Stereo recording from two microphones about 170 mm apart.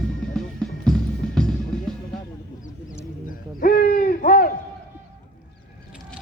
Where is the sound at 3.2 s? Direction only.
60° left (ahead or behind).